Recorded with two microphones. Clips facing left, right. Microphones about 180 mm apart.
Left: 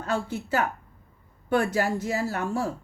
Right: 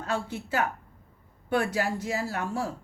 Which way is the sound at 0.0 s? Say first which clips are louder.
Left 3 dB; 45° left (ahead or behind).